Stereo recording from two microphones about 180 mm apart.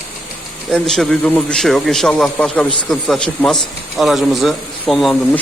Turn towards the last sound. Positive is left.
turn(degrees=0)  # may be behind; listen again after turning